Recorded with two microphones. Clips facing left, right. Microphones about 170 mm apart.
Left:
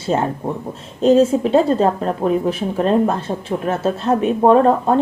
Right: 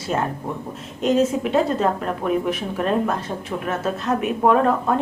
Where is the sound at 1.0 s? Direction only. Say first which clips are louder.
Left 6 dB; 30° left (ahead or behind).